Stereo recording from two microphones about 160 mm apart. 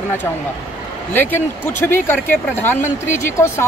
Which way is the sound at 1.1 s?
10° left (ahead or behind).